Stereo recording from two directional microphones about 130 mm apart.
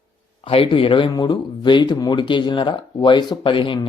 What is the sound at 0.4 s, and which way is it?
Speech, 40° left (ahead or behind).